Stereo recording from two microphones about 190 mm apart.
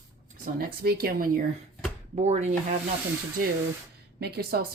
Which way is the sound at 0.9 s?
55° right (ahead or behind).